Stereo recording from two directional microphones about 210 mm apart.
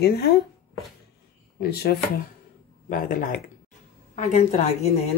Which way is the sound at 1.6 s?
50° left (ahead or behind).